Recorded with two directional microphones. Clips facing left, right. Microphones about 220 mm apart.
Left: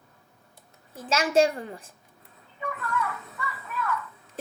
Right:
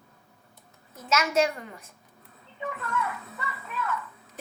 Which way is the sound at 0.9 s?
30° left (ahead or behind).